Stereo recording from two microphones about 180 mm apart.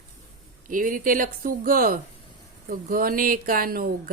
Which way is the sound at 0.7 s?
50° right (ahead or behind).